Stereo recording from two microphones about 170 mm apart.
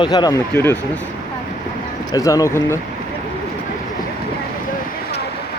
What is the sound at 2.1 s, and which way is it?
Speech, 20° left (ahead or behind).